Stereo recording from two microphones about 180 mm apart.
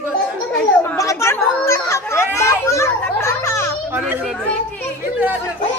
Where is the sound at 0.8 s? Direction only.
15° left (ahead or behind).